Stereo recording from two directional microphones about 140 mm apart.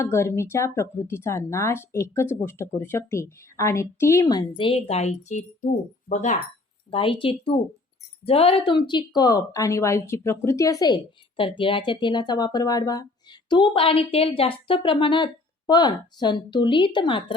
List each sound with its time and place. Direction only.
0.0 s a woman's voice: 20° left (ahead or behind); by 5.5 s 55° left (ahead or behind)
6.9 s a woman's voice: 40° left (ahead or behind)
13.5 s a woman's voice: 35° left (ahead or behind)